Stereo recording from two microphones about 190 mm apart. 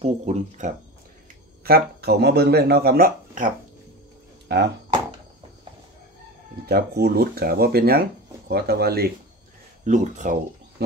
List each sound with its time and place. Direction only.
0.0 s speech: 35° right (ahead or behind)
1.6 s speech: 55° right (ahead or behind)
6.6 s speech: 55° right (ahead or behind)
9.8 s speech: 40° right (ahead or behind)